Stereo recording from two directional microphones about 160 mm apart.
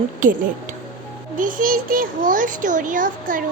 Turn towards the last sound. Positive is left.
turn(degrees=-55)  # may be behind; listen again after turning